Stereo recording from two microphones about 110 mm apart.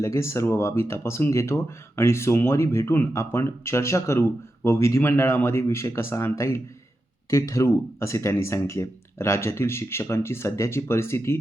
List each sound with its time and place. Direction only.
0.0 s speech: 25° left (ahead or behind)